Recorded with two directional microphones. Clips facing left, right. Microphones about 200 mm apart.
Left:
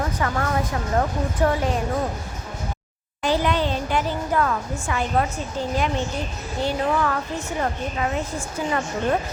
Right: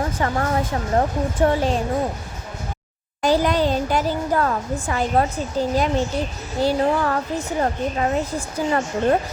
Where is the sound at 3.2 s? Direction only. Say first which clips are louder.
Right 3 dB; 40° right (ahead or behind).